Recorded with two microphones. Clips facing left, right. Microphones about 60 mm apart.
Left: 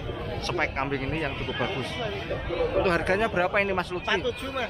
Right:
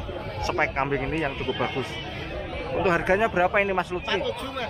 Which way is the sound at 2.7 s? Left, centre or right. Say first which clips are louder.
Right 4 dB; centre.